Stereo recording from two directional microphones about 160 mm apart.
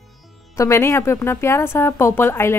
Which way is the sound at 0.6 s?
15° left (ahead or behind).